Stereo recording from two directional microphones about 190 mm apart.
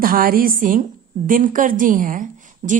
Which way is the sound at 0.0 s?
50° right (ahead or behind).